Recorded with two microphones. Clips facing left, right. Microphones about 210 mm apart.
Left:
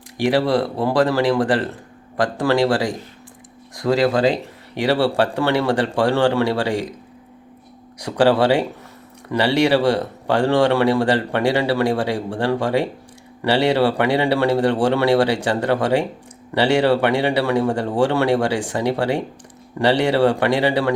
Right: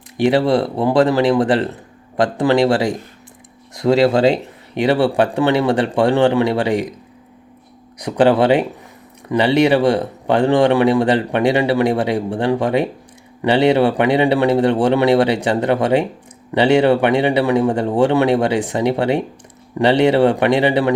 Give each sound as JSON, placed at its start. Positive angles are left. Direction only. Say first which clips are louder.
{"t": 0.2, "sound": "speech", "louder": "right 3 dB", "side_deg": -25}
{"t": 7.9, "sound": "speech", "louder": "right 2 dB", "side_deg": -20}